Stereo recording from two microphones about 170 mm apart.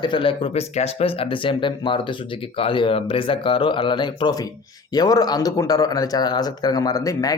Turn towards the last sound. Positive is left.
turn(degrees=20)  # may be behind; listen again after turning